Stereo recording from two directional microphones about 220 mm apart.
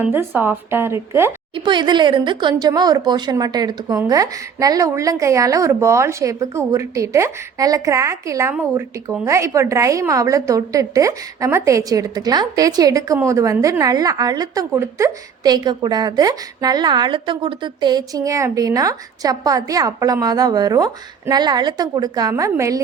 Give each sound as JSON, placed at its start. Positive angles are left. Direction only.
{"t": 0.0, "sound": "speech", "side_deg": -10}
{"t": 1.5, "sound": "speech", "side_deg": -20}